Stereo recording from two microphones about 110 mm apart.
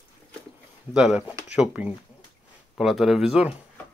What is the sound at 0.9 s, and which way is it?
Speech, 10° right (ahead or behind).